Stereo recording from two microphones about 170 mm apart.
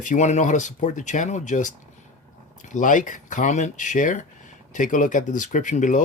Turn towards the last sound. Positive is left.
turn(degrees=45)  # may be behind; listen again after turning